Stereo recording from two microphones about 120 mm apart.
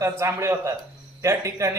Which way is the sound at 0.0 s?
20° right (ahead or behind).